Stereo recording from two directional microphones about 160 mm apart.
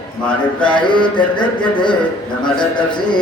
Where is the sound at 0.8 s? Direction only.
30° left (ahead or behind).